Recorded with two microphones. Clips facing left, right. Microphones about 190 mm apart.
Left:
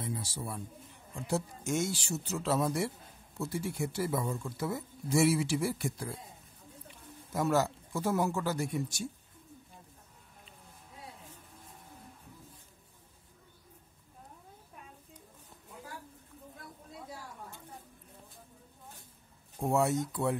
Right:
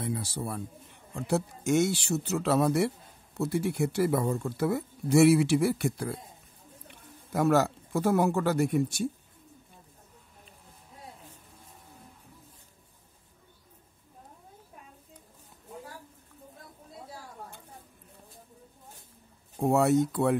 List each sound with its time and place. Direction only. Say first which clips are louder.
0.0 s a man's voice: right 5 dB; 60° right (ahead or behind)
19.6 s speech: right 6 dB; 65° right (ahead or behind)